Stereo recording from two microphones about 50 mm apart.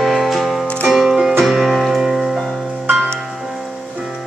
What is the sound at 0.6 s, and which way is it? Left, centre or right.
Music, centre.